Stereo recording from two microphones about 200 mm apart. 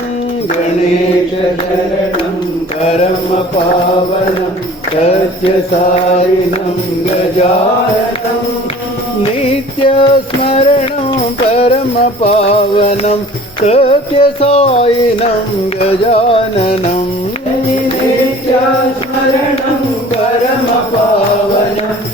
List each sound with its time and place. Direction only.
9.8 s music: 30° left (ahead or behind)